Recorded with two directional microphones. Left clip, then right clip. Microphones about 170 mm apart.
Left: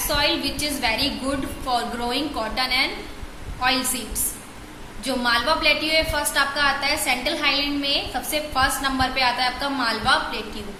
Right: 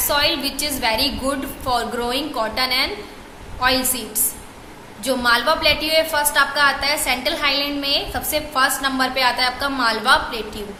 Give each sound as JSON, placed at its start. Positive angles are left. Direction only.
{"t": 0.1, "sound": "a woman's voice", "side_deg": -25}
{"t": 5.0, "sound": "a woman's voice", "side_deg": -25}